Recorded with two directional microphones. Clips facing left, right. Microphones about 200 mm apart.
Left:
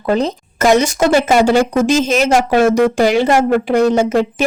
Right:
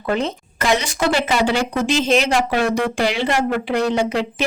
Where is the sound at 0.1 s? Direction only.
40° left (ahead or behind).